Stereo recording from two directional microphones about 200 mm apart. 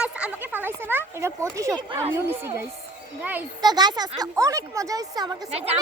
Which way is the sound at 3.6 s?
20° right (ahead or behind).